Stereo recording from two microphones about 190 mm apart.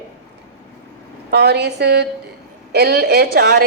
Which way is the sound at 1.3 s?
60° right (ahead or behind).